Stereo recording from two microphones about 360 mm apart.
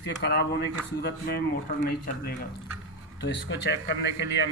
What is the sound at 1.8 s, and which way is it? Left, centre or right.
Speech, left.